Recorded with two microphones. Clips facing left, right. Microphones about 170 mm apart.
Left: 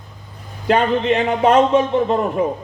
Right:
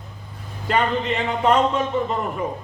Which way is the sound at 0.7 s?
90° left.